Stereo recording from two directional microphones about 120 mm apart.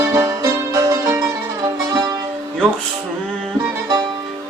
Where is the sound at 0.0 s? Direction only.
30° right (ahead or behind).